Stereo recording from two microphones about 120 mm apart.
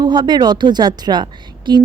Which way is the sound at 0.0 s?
40° right (ahead or behind).